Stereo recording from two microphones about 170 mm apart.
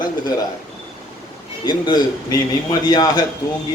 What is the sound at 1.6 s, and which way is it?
A man's voice, 25° left (ahead or behind).